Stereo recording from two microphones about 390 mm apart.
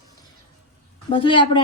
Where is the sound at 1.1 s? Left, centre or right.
Centre.